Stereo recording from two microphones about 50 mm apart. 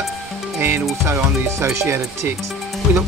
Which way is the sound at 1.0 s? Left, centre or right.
Right.